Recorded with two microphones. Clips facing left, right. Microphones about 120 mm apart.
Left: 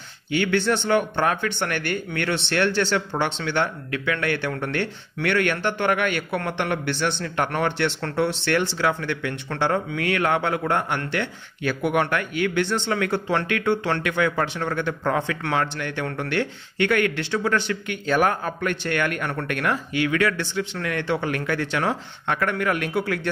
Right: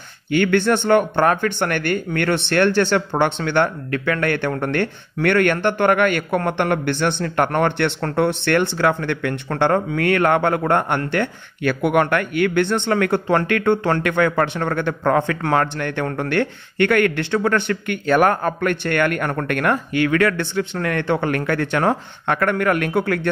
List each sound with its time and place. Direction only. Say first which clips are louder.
0.3 s a man's voice: right 5 dB; 50° right (ahead or behind)